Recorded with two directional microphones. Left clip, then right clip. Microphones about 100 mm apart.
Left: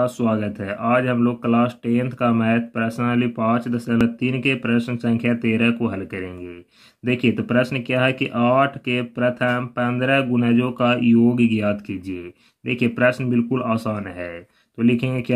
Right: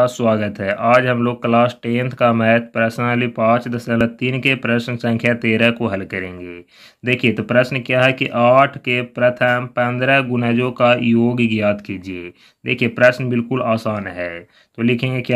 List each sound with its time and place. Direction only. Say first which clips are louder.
0.0 s speech: right 6 dB; 30° right (ahead or behind)